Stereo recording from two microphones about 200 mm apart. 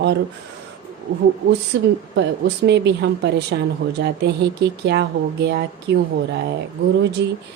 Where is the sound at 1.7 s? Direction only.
65° right (ahead or behind).